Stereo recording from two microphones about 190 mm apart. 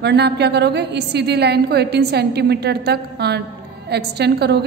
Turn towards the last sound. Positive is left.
turn(degrees=-60)  # may be behind; listen again after turning